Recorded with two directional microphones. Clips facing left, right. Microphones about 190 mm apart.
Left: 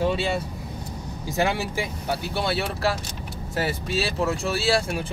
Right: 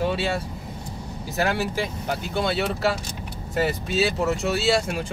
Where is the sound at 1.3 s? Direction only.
15° left (ahead or behind).